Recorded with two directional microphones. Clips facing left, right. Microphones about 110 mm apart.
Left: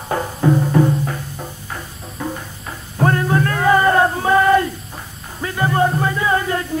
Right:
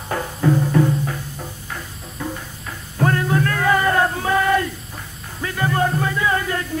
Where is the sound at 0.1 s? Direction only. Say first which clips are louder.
Left 2 dB; 25° left (ahead or behind).